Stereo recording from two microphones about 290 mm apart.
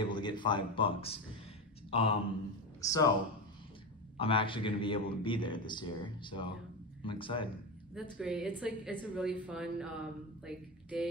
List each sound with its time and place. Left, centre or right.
0.0 s a man's voice: centre
4.2 s a man's voice: centre
7.9 s a woman's voice: centre